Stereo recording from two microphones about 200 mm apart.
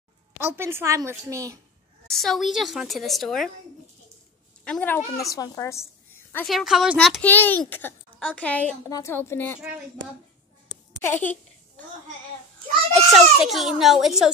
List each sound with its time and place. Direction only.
0.4 s a woman's voice: 10° right (ahead or behind)
2.0 s a woman's voice: centre (ahead or behind)
4.6 s speech: 5° left (ahead or behind)
6.3 s speech: centre (ahead or behind)
12.9 s a woman's voice: centre (ahead or behind)